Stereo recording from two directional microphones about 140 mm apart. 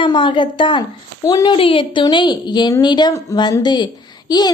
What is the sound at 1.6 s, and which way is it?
A woman's voice, 40° left (ahead or behind).